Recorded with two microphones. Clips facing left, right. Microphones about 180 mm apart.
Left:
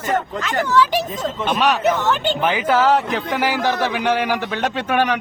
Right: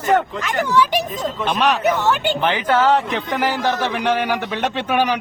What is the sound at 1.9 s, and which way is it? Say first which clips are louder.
Speech: even; 10° right (ahead or behind).